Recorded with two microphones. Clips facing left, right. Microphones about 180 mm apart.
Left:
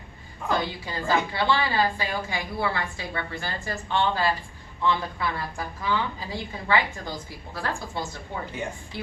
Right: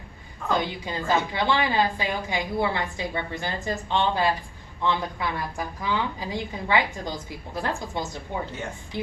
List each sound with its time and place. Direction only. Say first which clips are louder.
0.6 s a woman's voice: right 1 dB; 20° right (ahead or behind)